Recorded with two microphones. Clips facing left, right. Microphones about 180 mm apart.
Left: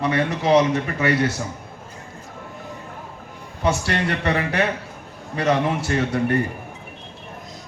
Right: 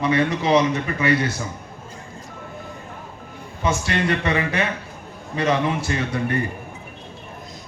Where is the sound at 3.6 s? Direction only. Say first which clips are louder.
Even; 65° left (ahead or behind).